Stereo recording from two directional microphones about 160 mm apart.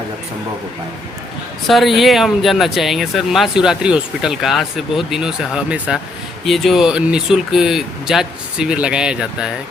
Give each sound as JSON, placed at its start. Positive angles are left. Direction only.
{"t": 1.6, "sound": "speech", "side_deg": 0}